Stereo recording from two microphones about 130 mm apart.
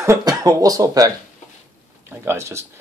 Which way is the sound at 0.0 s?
25° right (ahead or behind).